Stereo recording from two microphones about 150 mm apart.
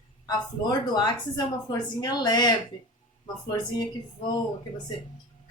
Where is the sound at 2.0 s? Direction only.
25° left (ahead or behind).